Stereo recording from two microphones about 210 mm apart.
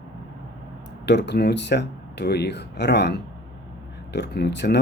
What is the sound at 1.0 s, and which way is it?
Speech, 55° left (ahead or behind).